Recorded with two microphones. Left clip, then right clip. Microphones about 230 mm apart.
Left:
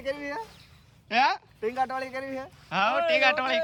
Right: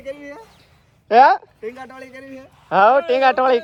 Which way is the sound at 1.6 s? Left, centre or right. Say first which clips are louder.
Left 4 dB; centre.